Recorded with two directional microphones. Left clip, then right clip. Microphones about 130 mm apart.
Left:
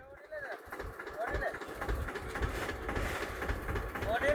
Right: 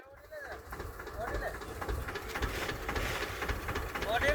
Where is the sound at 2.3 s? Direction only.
90° left.